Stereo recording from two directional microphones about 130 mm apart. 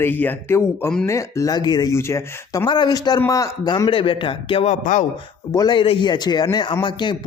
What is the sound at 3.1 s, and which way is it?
Speech, 25° left (ahead or behind).